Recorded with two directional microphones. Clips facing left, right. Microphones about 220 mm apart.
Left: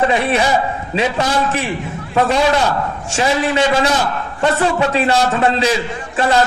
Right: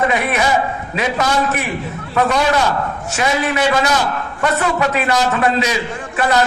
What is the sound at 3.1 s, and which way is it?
A man's voice, 30° left (ahead or behind).